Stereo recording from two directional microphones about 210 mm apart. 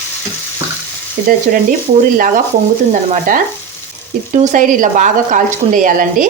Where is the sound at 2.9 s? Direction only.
40° right (ahead or behind).